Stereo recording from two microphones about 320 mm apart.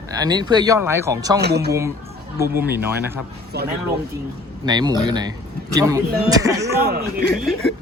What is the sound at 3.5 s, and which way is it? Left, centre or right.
Speech, right.